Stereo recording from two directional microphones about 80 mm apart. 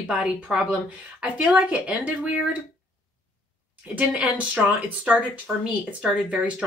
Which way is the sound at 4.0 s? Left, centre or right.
Centre.